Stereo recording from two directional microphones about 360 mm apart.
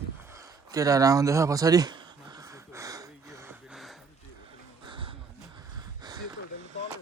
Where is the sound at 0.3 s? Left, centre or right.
Centre.